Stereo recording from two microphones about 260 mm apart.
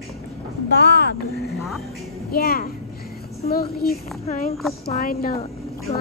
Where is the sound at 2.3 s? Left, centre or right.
Left.